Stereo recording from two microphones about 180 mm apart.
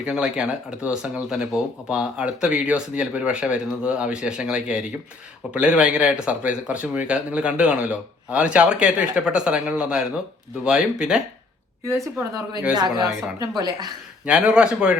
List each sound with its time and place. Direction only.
0.0 s speech: 5° right (ahead or behind)
12.7 s speech: 20° right (ahead or behind)
14.3 s speech: 5° right (ahead or behind)